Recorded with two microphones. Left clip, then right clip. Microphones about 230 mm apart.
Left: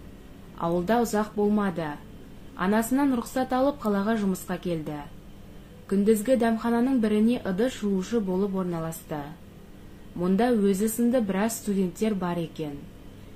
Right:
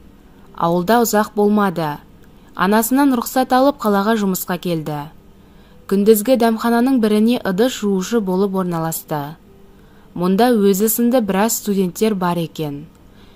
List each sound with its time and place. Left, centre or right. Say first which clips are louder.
0.6 s speech: right 10 dB; right